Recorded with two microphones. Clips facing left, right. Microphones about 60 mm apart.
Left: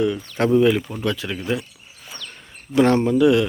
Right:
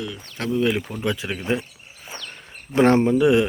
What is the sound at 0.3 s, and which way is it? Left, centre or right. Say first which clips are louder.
Speech: left 7 dB; left.